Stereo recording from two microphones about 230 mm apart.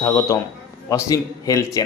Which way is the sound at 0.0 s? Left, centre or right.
Centre.